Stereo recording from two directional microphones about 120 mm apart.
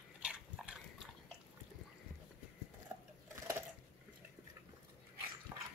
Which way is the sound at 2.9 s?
10° right (ahead or behind).